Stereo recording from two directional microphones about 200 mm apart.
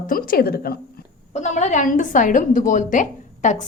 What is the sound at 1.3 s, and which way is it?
A woman's voice, 35° left (ahead or behind).